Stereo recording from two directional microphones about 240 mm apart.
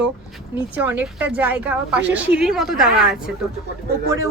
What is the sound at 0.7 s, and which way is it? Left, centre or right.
A woman's voice, centre.